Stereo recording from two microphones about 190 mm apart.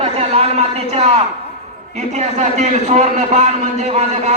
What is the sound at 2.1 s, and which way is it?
A man's voice, 40° right (ahead or behind).